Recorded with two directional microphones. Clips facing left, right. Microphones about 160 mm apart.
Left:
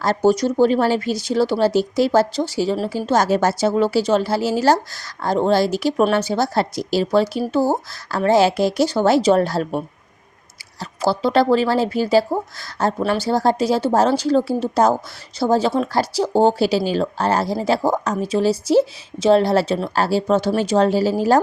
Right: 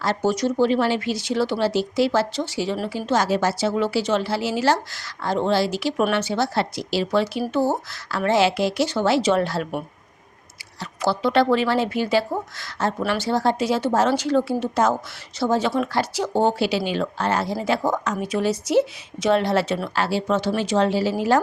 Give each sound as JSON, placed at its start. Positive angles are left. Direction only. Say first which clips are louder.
{"t": 0.0, "sound": "speech", "louder": "left 5 dB", "side_deg": 40}